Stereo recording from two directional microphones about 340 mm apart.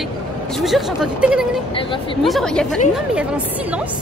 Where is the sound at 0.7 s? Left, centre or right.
Centre.